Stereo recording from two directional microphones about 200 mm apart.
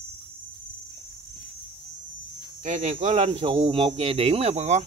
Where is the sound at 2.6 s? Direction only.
40° right (ahead or behind).